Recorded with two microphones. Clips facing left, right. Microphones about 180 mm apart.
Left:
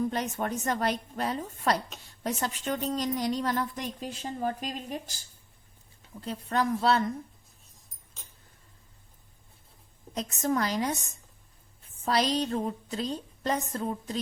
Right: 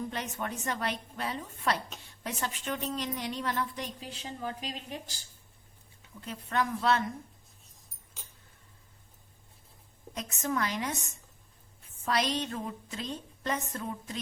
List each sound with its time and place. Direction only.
0.1 s a woman's voice: 40° left (ahead or behind)
6.1 s a woman's voice: 35° left (ahead or behind)
10.2 s a woman's voice: 35° left (ahead or behind)
12.0 s a woman's voice: 35° left (ahead or behind)